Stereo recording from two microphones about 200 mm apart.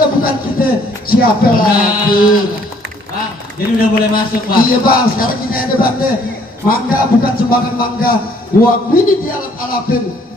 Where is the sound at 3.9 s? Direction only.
45° left (ahead or behind).